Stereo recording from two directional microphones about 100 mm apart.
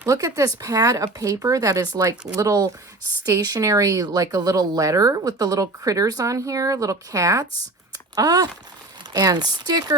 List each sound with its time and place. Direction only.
0.0 s speech: 35° right (ahead or behind)